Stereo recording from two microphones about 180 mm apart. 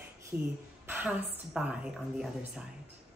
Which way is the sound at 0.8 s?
10° right (ahead or behind).